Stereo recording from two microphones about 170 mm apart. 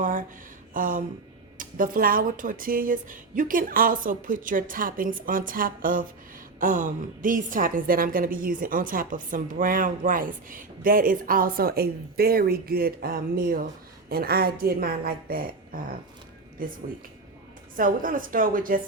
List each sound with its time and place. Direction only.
0.0 s a sound: 55° right (ahead or behind)
1.5 s a woman's voice: 55° right (ahead or behind)
17.7 s a woman's voice: 55° right (ahead or behind)